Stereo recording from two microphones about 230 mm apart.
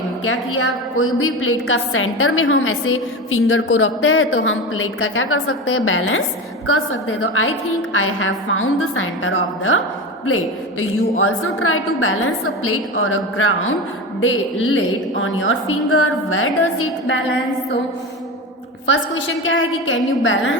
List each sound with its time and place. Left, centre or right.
0.3 s a woman's voice: left
18.9 s a woman's voice: left